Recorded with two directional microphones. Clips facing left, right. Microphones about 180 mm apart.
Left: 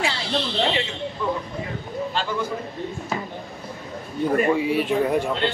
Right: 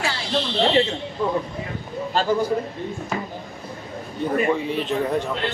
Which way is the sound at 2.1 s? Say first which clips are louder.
Right 7 dB; 40° right (ahead or behind).